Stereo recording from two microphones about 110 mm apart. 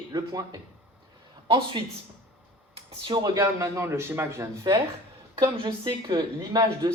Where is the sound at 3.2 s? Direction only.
25° right (ahead or behind).